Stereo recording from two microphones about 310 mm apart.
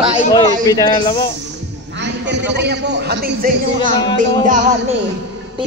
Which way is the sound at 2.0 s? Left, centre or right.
Right.